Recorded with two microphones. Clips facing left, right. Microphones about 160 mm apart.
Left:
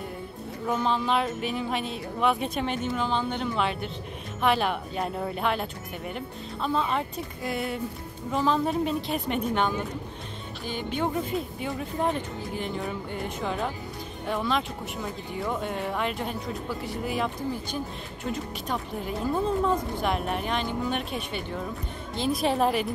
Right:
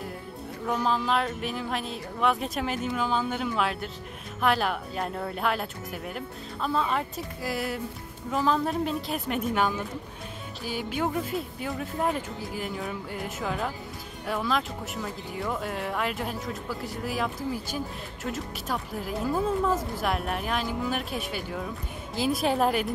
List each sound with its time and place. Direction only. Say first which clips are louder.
0.7 s speech: left 1 dB; centre (ahead or behind)